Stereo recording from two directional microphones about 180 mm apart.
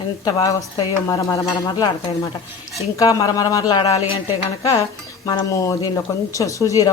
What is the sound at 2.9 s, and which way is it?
Speech, 20° left (ahead or behind).